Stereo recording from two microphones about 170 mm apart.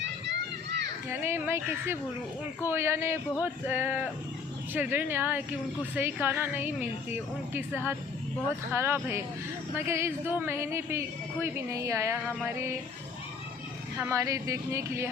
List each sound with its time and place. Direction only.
1.1 s a woman's voice: 15° right (ahead or behind)
14.0 s a woman's voice: 20° right (ahead or behind)